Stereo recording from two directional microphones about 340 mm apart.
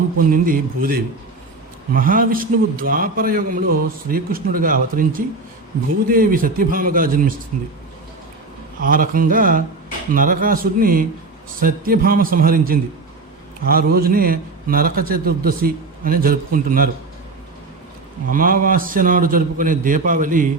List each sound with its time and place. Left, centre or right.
0.2 s a man's voice: right
8.8 s a man's voice: right
18.3 s a man's voice: right